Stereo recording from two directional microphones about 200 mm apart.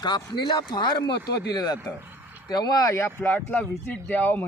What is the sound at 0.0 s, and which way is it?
Speech, 20° left (ahead or behind).